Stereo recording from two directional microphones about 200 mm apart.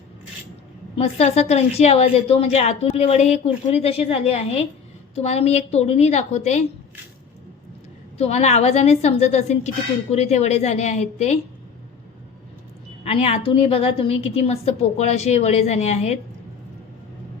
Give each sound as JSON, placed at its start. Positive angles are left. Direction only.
{"t": 0.9, "sound": "a woman's voice", "side_deg": 35}
{"t": 8.2, "sound": "a woman's voice", "side_deg": 35}
{"t": 13.1, "sound": "a woman's voice", "side_deg": 30}